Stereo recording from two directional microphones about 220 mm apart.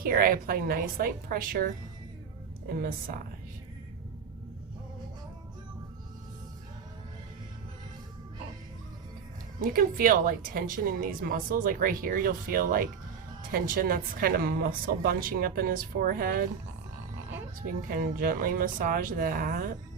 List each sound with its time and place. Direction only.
0.0 s a woman's voice: 40° right (ahead or behind)
9.6 s a woman's voice: 40° right (ahead or behind)
17.8 s a woman's voice: 40° right (ahead or behind)